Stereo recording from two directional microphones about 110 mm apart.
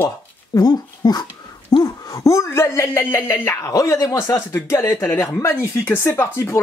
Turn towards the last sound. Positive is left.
turn(degrees=20)  # may be behind; listen again after turning